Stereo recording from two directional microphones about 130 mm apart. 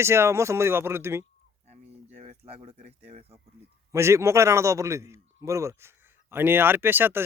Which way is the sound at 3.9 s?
20° right (ahead or behind).